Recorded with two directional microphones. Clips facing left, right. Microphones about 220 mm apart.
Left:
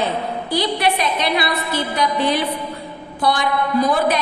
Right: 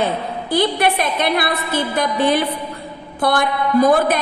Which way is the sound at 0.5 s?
50° right (ahead or behind).